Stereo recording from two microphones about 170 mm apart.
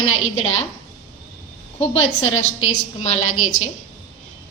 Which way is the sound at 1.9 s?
35° left (ahead or behind).